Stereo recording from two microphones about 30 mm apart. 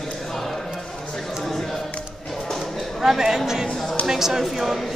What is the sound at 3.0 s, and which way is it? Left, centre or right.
A woman's voice, centre.